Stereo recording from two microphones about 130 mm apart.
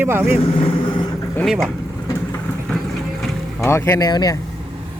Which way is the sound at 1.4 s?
Centre (ahead or behind).